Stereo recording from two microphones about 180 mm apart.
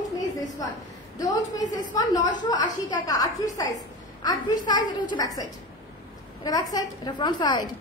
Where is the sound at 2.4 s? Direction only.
20° left (ahead or behind).